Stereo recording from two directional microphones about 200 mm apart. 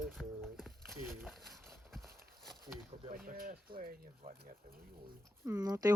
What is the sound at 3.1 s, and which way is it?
Speech, 45° right (ahead or behind).